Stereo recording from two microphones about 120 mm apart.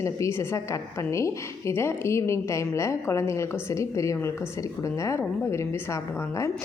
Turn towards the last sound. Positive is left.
turn(degrees=25)  # may be behind; listen again after turning